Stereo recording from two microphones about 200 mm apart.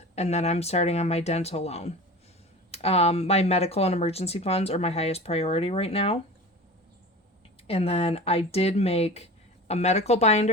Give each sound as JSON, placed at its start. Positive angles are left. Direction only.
{"t": 0.2, "sound": "speech", "side_deg": 35}
{"t": 7.7, "sound": "speech", "side_deg": 30}